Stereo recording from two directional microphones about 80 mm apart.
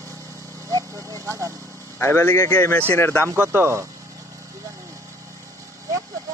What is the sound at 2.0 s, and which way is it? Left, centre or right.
Speech, left.